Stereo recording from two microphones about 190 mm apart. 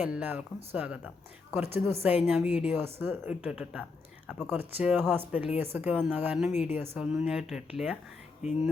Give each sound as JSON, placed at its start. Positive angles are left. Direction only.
{"t": 0.0, "sound": "speech", "side_deg": -5}
{"t": 8.4, "sound": "speech", "side_deg": 35}